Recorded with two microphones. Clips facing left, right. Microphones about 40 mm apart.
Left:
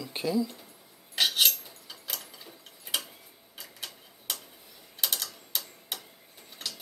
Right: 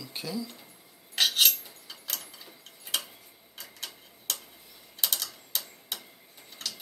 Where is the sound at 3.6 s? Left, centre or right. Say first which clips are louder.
Even; centre.